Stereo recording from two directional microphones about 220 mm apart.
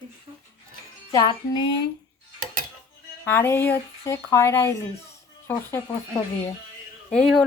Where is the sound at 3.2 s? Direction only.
10° left (ahead or behind).